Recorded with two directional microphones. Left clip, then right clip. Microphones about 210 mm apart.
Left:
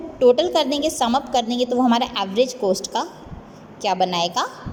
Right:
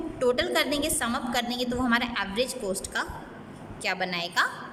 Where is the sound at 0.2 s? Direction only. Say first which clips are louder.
Left 9 dB; 15° left (ahead or behind).